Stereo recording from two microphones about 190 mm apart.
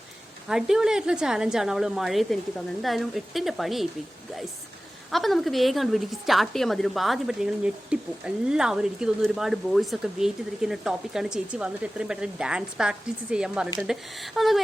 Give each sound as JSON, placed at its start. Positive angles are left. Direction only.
{"t": 0.4, "sound": "a woman's voice", "side_deg": -5}
{"t": 5.1, "sound": "a woman's voice", "side_deg": 0}